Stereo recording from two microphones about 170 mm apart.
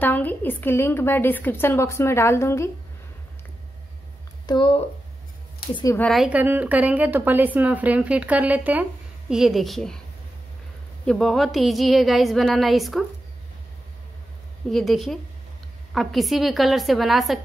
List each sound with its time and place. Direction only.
0.0 s a woman's voice: 10° left (ahead or behind)
4.5 s speech: 30° left (ahead or behind)
5.9 s a woman's voice: centre (ahead or behind)
11.1 s a woman's voice: centre (ahead or behind)
14.7 s a woman's voice: centre (ahead or behind)